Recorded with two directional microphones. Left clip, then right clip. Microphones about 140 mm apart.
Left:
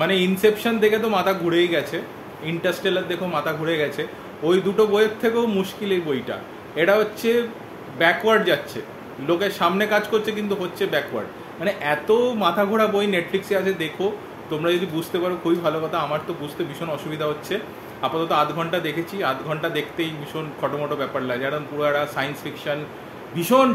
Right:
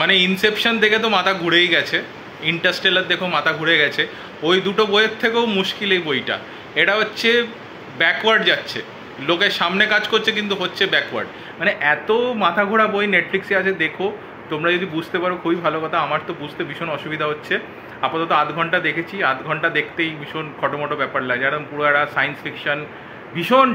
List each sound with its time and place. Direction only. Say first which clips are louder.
0.0 s a man's voice: right 3 dB; 5° left (ahead or behind)